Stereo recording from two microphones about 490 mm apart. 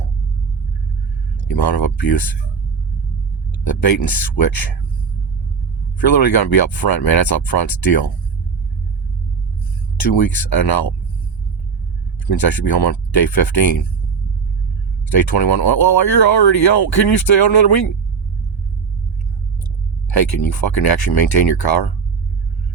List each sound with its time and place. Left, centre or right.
1.5 s speech: left
3.6 s speech: left
6.0 s speech: left
10.0 s speech: left
12.3 s speech: left
15.1 s speech: left
20.1 s speech: left